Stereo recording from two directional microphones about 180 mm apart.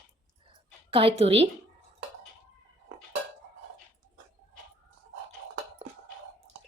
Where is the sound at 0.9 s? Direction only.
30° right (ahead or behind).